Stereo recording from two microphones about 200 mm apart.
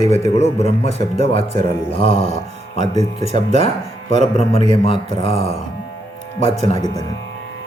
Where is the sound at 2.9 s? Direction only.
35° right (ahead or behind).